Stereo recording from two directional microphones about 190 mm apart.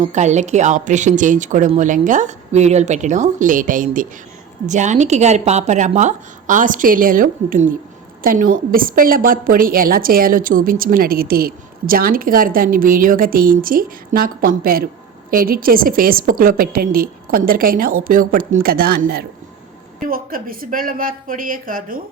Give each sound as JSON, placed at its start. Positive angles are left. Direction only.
{"t": 0.0, "sound": "a woman's voice", "side_deg": -40}